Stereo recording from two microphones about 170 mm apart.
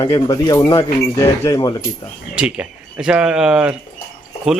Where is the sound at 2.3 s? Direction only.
5° right (ahead or behind).